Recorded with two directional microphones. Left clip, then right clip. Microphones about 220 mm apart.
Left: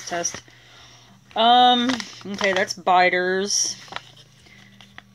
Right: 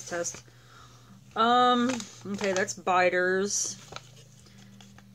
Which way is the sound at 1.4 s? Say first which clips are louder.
Left 7 dB; 15° left (ahead or behind).